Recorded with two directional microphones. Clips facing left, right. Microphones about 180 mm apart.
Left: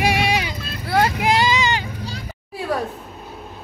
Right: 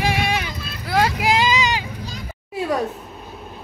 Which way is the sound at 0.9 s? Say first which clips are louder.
Left 1 dB; 5° right (ahead or behind).